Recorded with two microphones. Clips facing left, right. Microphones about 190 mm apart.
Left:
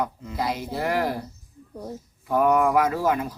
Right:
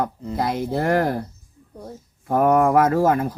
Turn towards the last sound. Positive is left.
turn(degrees=-50)  # may be behind; listen again after turning